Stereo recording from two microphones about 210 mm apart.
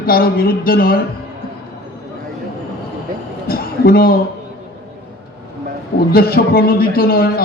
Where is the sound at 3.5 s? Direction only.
45° left (ahead or behind).